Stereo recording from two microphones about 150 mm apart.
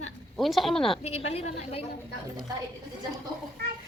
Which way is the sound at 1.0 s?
45° left (ahead or behind).